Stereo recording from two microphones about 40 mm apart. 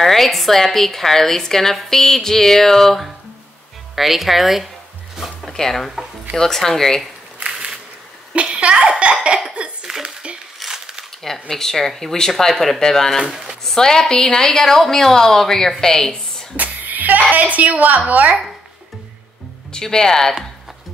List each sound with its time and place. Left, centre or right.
0.0 s a woman's voice: centre
3.9 s speech: centre
5.5 s a woman's voice: centre
7.4 s a sound: right
8.3 s a child's voice: right
9.6 s hiccup: right
10.6 s a sound: centre
11.2 s a woman's voice: centre
16.5 s a woman's voice: right
19.7 s a woman's voice: centre